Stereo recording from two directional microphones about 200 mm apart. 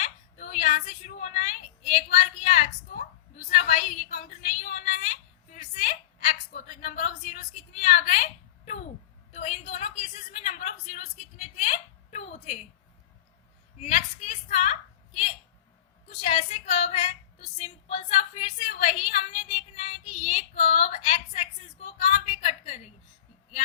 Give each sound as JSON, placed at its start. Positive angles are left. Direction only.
{"t": 0.0, "sound": "a woman's voice", "side_deg": 35}
{"t": 13.8, "sound": "a woman's voice", "side_deg": 35}